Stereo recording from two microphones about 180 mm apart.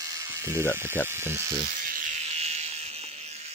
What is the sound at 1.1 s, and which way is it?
Speech, 15° right (ahead or behind).